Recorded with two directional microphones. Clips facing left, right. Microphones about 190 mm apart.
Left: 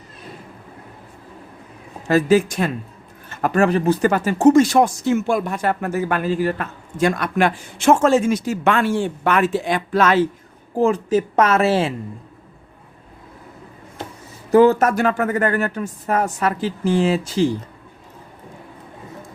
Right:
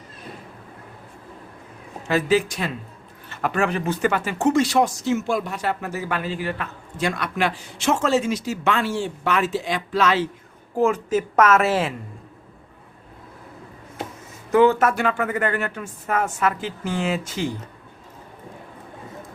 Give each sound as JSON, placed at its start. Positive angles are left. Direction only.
{"t": 2.0, "sound": "speech", "side_deg": 45}
{"t": 10.8, "sound": "a woman's voice", "side_deg": 35}
{"t": 14.5, "sound": "a woman's voice", "side_deg": 35}